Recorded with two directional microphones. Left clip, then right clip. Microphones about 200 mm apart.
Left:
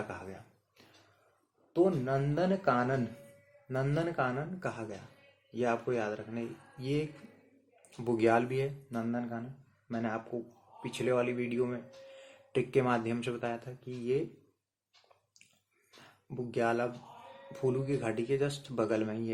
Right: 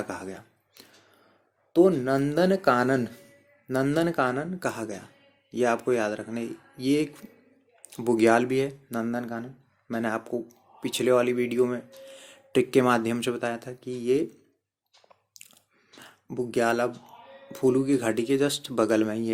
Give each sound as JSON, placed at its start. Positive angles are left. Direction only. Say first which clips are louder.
{"t": 0.1, "sound": "dishes", "louder": "right 8 dB", "side_deg": -45}
{"t": 1.7, "sound": "speech", "louder": "right 8 dB", "side_deg": -50}
{"t": 16.0, "sound": "speech", "louder": "right 9 dB", "side_deg": -45}